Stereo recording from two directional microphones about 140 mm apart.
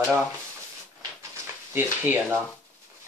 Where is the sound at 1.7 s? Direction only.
15° right (ahead or behind).